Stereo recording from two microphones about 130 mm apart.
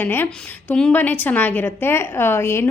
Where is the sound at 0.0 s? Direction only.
15° left (ahead or behind).